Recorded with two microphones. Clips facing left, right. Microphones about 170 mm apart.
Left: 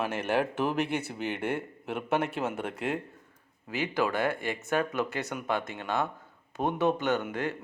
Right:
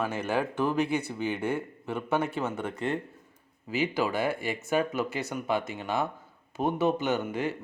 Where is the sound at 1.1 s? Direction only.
80° left.